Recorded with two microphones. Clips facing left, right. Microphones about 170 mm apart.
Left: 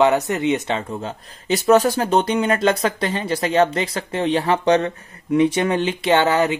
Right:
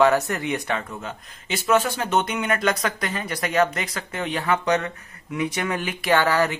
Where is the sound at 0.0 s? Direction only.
20° left (ahead or behind).